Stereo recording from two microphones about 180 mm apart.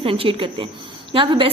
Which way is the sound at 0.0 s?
30° right (ahead or behind).